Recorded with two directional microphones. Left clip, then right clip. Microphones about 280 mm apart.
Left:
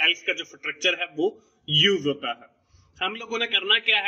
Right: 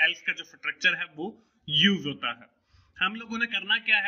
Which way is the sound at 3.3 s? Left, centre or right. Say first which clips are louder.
Left 10 dB; right.